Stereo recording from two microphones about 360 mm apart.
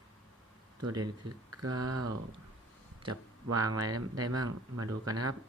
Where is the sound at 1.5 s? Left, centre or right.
Right.